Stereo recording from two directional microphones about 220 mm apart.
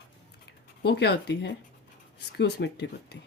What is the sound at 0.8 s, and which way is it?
Speech, 45° left (ahead or behind).